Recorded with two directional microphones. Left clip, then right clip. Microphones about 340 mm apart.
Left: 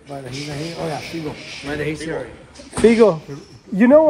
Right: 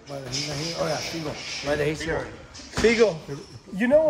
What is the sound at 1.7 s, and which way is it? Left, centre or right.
Speech, right.